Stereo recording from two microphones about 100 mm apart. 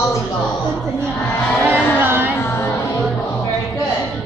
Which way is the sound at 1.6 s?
20° right (ahead or behind).